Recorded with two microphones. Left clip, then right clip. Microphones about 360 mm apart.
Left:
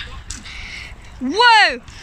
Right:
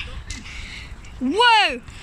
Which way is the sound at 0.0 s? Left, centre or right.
Centre.